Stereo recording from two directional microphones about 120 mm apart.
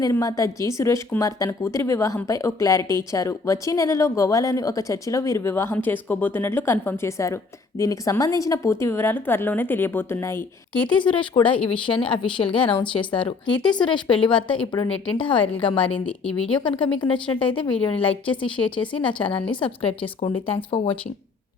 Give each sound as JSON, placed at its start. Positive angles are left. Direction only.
{"t": 0.0, "sound": "a woman's voice", "side_deg": 30}
{"t": 11.0, "sound": "a woman's voice", "side_deg": 45}